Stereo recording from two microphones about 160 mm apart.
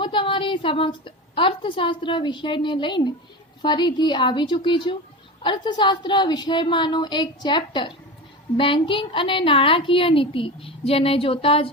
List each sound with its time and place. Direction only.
0.0 s a woman's voice: 30° left (ahead or behind)